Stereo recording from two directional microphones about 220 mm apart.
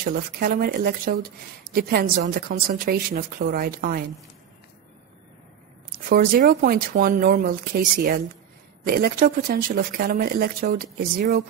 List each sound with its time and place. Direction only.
0.0 s speech: 40° right (ahead or behind)
6.0 s speech: 40° right (ahead or behind)